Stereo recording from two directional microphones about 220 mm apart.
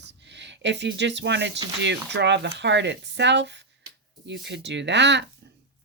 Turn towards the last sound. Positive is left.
turn(degrees=-50)  # may be behind; listen again after turning